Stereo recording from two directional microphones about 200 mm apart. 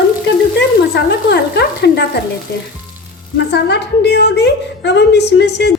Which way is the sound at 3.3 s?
55° left (ahead or behind).